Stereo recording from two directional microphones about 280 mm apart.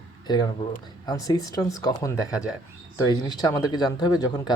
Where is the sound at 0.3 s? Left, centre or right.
Centre.